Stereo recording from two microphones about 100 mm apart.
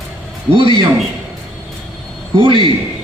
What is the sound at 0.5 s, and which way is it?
Speech, 60° right (ahead or behind).